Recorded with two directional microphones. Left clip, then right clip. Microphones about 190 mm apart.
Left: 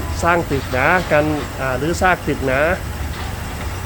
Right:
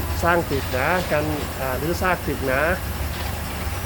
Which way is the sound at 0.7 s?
25° left (ahead or behind).